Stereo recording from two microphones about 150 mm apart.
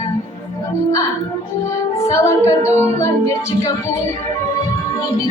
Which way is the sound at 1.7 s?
20° left (ahead or behind).